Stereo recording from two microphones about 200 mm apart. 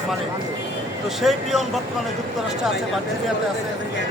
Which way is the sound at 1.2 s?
Centre (ahead or behind).